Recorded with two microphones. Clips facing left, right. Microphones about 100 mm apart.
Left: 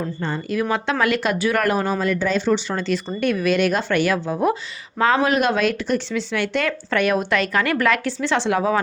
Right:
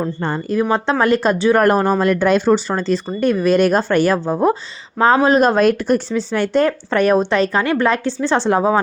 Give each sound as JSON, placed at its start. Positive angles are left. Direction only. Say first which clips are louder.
{"t": 0.0, "sound": "speech", "louder": "right 5 dB", "side_deg": -50}
{"t": 0.5, "sound": "speech", "louder": "right 5 dB", "side_deg": -30}
{"t": 1.6, "sound": "speech", "louder": "right 6 dB", "side_deg": -45}
{"t": 2.5, "sound": "speech", "louder": "right 5 dB", "side_deg": -35}